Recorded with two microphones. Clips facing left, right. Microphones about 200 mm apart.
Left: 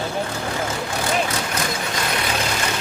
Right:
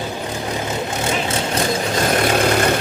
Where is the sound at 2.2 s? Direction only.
55° right (ahead or behind).